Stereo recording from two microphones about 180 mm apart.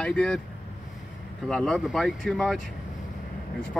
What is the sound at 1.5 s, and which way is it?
Speech, 5° left (ahead or behind).